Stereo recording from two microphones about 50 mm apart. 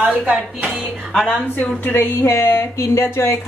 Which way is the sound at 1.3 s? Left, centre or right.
Left.